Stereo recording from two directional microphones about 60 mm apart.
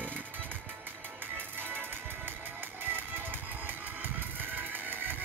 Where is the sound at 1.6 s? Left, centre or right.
Right.